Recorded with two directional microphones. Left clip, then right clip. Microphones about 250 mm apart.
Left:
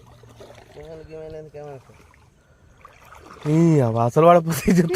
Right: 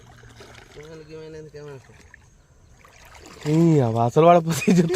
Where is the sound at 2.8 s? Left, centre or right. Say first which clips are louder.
Left 2 dB; right.